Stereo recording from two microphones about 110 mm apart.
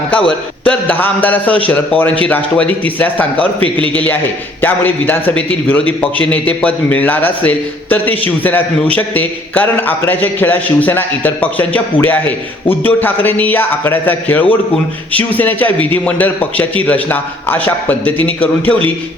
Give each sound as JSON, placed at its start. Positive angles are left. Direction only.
{"t": 0.3, "sound": "a man's voice", "side_deg": 15}